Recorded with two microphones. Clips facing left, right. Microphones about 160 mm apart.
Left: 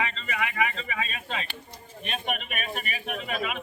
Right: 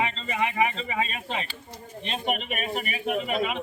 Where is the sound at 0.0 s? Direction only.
25° right (ahead or behind).